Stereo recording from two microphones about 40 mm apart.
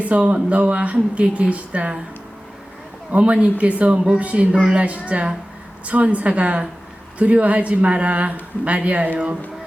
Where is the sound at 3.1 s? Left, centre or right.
Right.